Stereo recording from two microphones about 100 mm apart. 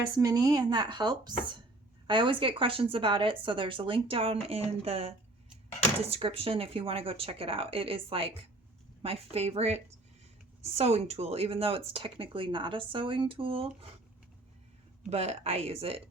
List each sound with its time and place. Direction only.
0.2 s speech: 40° right (ahead or behind); by 13.8 s 65° right (ahead or behind)
15.1 s speech: 90° right; by 16.0 s 70° right (ahead or behind)